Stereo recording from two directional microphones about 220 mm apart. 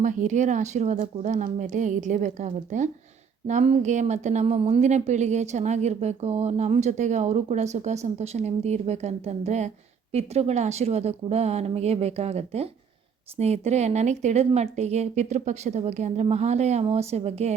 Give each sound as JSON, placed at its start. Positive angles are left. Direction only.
{"t": 0.0, "sound": "speech", "side_deg": -35}